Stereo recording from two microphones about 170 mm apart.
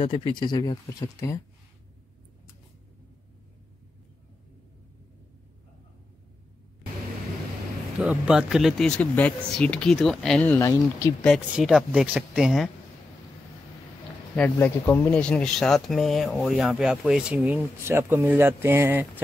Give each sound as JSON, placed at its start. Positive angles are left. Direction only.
{"t": 0.0, "sound": "speech", "side_deg": 30}
{"t": 8.0, "sound": "speech", "side_deg": -5}
{"t": 10.7, "sound": "speech", "side_deg": 20}
{"t": 11.2, "sound": "speech", "side_deg": 0}
{"t": 14.3, "sound": "speech", "side_deg": 10}